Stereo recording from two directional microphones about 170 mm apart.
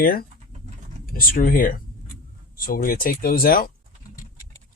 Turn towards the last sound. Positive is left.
turn(degrees=60)  # may be behind; listen again after turning